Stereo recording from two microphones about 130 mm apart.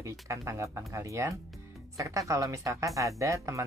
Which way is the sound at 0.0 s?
25° right (ahead or behind).